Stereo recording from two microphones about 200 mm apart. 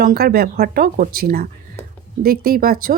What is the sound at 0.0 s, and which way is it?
Speech, 50° right (ahead or behind).